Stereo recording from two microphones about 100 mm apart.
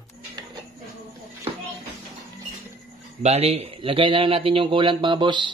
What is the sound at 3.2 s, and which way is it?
A man's voice, 90° right.